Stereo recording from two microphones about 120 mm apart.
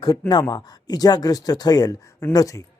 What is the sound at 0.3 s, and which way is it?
Speech, 35° left (ahead or behind).